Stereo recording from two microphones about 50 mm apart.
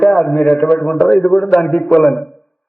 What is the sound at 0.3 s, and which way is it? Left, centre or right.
Speech, left.